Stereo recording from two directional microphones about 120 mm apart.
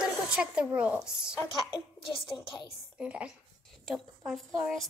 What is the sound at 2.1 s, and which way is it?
Speech, 45° left (ahead or behind).